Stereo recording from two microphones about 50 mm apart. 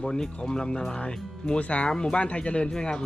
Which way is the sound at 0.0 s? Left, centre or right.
Centre.